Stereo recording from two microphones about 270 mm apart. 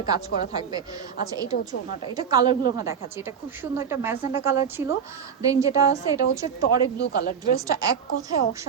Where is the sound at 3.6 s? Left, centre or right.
Centre.